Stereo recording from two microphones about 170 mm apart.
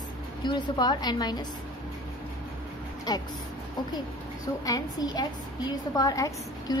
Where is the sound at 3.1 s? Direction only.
20° left (ahead or behind).